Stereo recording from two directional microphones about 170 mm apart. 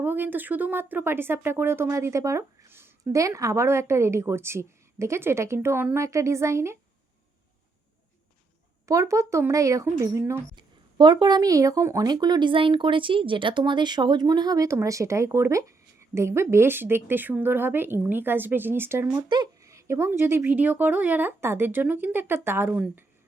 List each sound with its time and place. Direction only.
0.0 s speech: 10° right (ahead or behind)
8.9 s speech: 20° right (ahead or behind)
10.5 s speech: 25° right (ahead or behind); by 23.0 s 10° right (ahead or behind)